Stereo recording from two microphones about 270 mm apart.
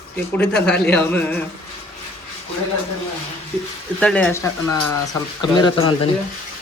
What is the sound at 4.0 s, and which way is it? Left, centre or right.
Speech, centre.